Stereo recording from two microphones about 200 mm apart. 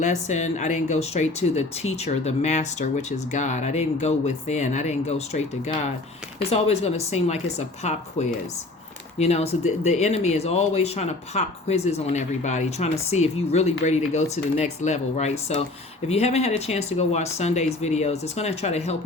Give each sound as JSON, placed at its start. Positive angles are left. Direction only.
{"t": 0.0, "sound": "speech", "side_deg": 35}
{"t": 9.1, "sound": "speech", "side_deg": 35}